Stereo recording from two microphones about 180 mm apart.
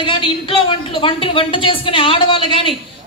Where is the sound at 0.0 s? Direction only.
30° left (ahead or behind).